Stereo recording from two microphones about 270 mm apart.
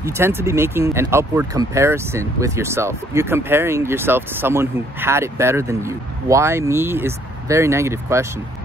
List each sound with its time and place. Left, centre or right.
0.0 s speech: centre